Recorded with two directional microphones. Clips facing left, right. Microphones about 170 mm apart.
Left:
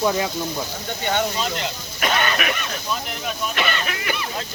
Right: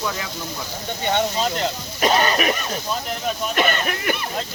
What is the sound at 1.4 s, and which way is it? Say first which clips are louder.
Speech: right 4 dB; 35° right (ahead or behind).